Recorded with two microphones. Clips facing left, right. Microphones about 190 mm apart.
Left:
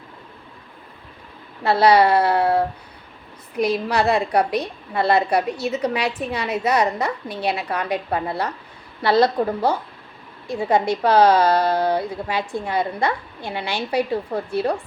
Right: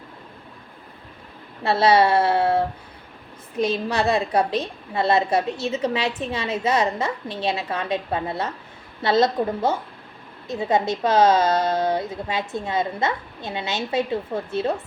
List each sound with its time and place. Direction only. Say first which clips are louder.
1.6 s a woman's voice: left 2 dB; 25° right (ahead or behind)